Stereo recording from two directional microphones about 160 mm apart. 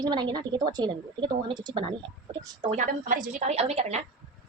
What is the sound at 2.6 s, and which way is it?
A woman's voice, 50° right (ahead or behind).